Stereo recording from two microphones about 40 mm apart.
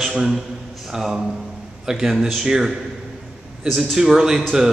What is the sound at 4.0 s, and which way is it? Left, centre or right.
Speech, centre.